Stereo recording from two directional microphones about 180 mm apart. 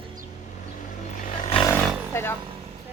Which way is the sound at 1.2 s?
50° left (ahead or behind).